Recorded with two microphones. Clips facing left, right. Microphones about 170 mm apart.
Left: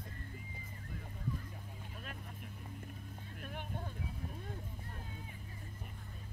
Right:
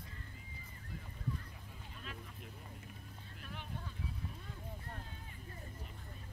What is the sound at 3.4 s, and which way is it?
Vehicle, 50° left (ahead or behind).